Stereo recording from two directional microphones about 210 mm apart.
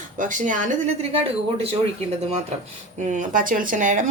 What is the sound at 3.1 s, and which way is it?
Speech, 40° right (ahead or behind).